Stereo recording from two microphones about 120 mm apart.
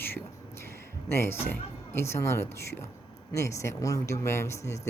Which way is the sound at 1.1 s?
20° left (ahead or behind).